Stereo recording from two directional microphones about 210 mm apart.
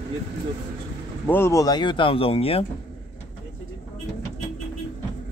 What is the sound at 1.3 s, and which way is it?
Speech, 15° left (ahead or behind).